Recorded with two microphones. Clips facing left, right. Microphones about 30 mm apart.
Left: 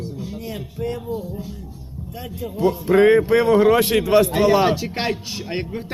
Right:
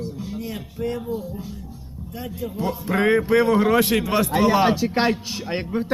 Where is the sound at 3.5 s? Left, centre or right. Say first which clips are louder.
Left 3 dB; centre.